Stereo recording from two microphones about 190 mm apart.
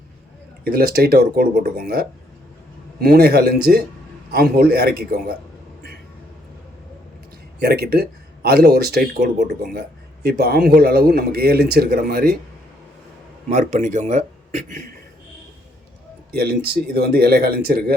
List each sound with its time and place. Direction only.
0.6 s speech: 55° right (ahead or behind)
7.6 s speech: 55° right (ahead or behind)
13.5 s speech: 40° right (ahead or behind)
16.3 s speech: 55° right (ahead or behind)